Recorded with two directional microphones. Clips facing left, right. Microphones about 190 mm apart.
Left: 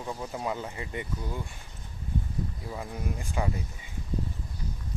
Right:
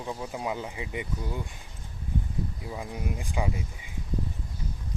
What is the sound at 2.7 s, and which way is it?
Speech, 15° right (ahead or behind).